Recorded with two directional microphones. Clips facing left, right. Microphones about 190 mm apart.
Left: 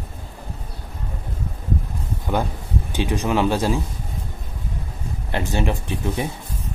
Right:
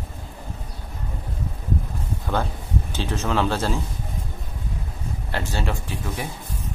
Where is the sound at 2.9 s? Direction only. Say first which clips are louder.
Left 4 dB; 15° left (ahead or behind).